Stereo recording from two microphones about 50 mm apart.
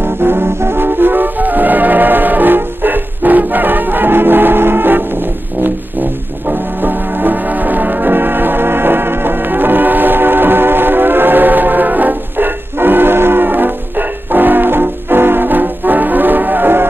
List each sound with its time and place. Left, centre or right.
0.0 s music: right